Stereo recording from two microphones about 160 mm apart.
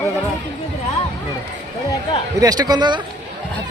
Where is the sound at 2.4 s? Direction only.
25° right (ahead or behind).